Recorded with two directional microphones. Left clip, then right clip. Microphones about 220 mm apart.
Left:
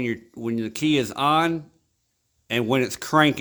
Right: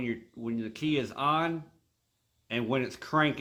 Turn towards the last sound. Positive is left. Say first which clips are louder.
# left 8 dB
turn(degrees=55)  # may be behind; listen again after turning